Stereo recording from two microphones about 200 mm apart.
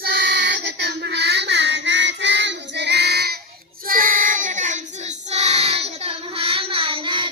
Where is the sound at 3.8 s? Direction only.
45° right (ahead or behind); by 7.3 s 25° right (ahead or behind).